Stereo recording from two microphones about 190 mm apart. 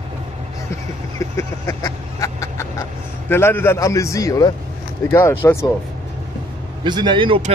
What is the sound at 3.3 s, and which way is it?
A man's voice, 10° left (ahead or behind).